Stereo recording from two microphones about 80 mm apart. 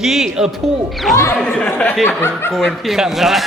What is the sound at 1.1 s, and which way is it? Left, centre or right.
Speech, left.